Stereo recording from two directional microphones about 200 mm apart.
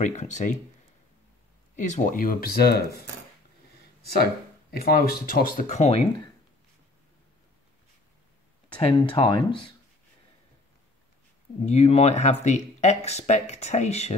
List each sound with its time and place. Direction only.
0.0 s speech: 35° left (ahead or behind)
1.8 s speech: 35° left (ahead or behind)
4.2 s speech: 50° left (ahead or behind)
8.7 s speech: 25° left (ahead or behind)
11.6 s speech: 30° left (ahead or behind)